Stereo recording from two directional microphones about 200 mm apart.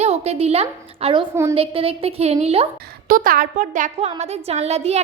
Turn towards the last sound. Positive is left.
turn(degrees=-30)  # may be behind; listen again after turning